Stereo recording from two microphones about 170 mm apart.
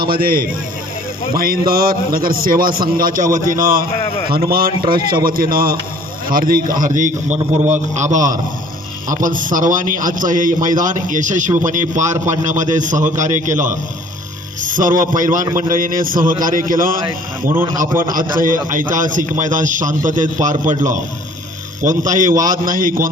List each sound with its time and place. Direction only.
0.0 s a man's voice: 60° right (ahead or behind)
14.7 s a man's voice: 50° right (ahead or behind)
18.4 s a man's voice: 50° right (ahead or behind)